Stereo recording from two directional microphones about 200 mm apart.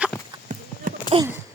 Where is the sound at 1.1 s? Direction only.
30° right (ahead or behind).